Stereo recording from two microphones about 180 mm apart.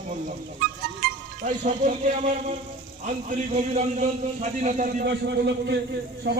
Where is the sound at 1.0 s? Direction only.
45° right (ahead or behind).